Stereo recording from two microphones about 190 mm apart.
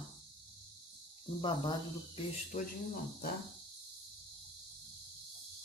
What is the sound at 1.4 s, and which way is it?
Speech, 25° left (ahead or behind).